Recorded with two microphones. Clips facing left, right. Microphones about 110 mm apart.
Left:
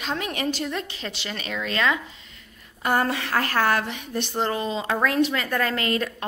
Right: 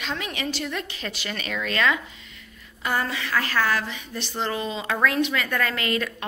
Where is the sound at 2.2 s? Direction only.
40° left (ahead or behind).